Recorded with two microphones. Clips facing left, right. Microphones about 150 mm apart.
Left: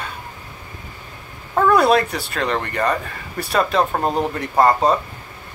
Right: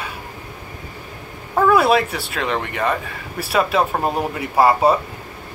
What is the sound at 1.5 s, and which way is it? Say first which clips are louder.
Speech: even; 5° right (ahead or behind).